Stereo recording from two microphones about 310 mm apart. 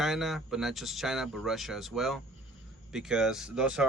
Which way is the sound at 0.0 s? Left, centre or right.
Centre.